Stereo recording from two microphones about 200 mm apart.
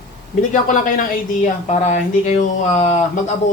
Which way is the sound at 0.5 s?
40° left (ahead or behind).